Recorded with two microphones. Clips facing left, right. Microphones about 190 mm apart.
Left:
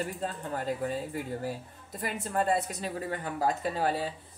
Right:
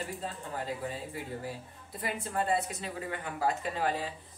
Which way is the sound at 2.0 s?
45° left (ahead or behind).